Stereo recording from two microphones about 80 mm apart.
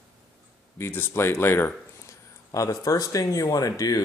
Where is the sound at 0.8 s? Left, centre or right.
Left.